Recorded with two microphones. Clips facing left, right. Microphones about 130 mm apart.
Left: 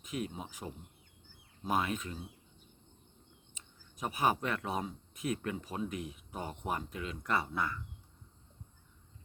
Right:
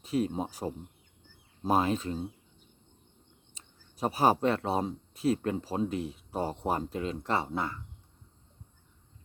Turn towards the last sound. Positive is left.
turn(degrees=-25)  # may be behind; listen again after turning